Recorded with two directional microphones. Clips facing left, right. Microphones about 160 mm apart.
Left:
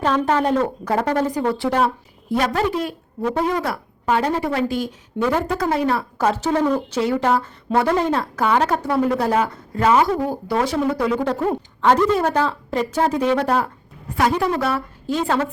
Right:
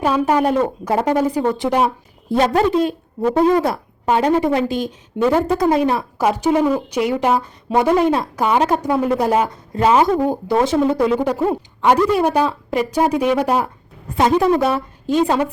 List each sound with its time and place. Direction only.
0.0 s a woman's voice: 10° right (ahead or behind)